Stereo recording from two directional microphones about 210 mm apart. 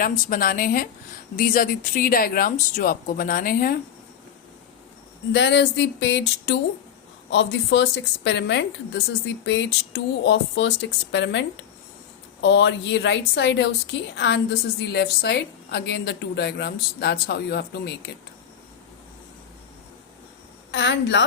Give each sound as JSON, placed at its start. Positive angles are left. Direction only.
{"t": 0.0, "sound": "speech", "side_deg": 40}
{"t": 5.3, "sound": "a woman's voice", "side_deg": 55}
{"t": 20.7, "sound": "a woman's voice", "side_deg": 55}